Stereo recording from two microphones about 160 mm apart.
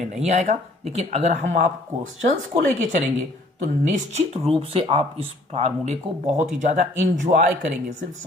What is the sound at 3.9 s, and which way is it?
Speech, 45° right (ahead or behind).